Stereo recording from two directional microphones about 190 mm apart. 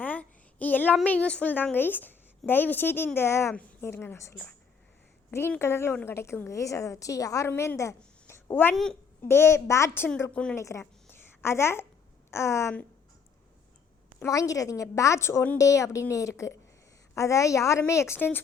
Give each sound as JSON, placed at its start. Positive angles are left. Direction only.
{"t": 0.0, "sound": "child singing", "side_deg": 10}
{"t": 0.9, "sound": "a woman's voice", "side_deg": 10}
{"t": 14.2, "sound": "a woman's voice", "side_deg": 15}